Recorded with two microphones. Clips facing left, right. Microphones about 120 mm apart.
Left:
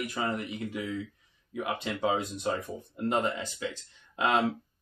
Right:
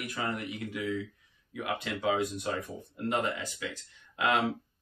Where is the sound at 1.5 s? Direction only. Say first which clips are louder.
Left 2 dB; 25° left (ahead or behind).